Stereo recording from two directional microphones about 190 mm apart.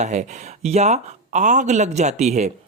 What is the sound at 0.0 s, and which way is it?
Speech, 40° right (ahead or behind).